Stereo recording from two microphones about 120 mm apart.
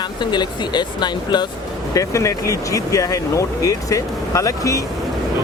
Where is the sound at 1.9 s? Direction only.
25° left (ahead or behind).